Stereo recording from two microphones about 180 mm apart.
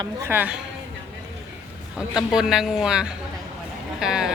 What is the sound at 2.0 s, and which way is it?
A woman's voice, 5° right (ahead or behind).